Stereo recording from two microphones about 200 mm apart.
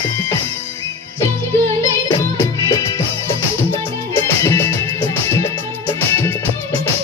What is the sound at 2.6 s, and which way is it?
Music, 20° left (ahead or behind).